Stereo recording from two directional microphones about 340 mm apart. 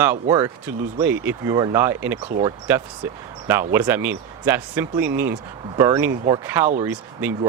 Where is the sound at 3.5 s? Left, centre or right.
Centre.